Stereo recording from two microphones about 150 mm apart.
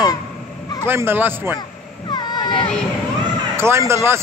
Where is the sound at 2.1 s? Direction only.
30° left (ahead or behind).